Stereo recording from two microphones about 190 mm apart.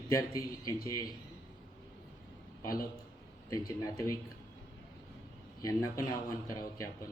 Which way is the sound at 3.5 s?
20° left (ahead or behind).